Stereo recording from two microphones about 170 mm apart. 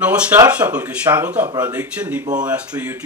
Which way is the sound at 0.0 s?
10° right (ahead or behind).